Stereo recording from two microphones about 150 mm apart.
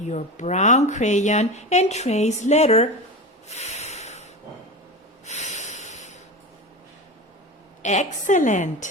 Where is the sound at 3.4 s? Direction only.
50° left (ahead or behind).